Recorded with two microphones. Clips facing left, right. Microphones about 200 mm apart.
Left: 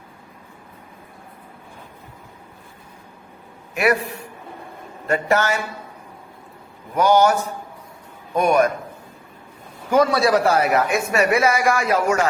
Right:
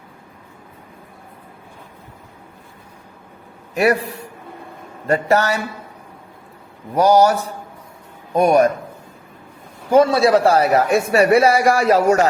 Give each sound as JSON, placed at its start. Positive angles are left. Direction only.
{"t": 5.0, "sound": "speech", "side_deg": -35}
{"t": 6.9, "sound": "a man's voice", "side_deg": -35}
{"t": 9.9, "sound": "speech", "side_deg": -25}